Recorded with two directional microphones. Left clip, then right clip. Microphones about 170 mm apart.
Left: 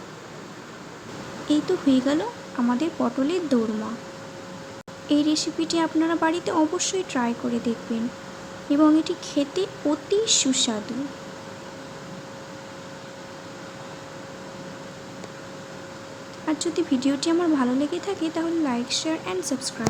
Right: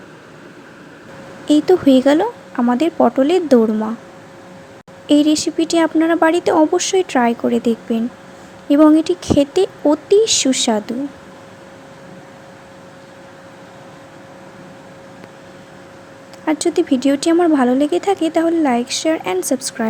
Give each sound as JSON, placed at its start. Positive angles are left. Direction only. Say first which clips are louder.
{"t": 1.5, "sound": "speech", "louder": "right 10 dB", "side_deg": -45}
{"t": 5.0, "sound": "speech", "louder": "right 9 dB", "side_deg": -45}
{"t": 16.5, "sound": "speech", "louder": "right 9 dB", "side_deg": -40}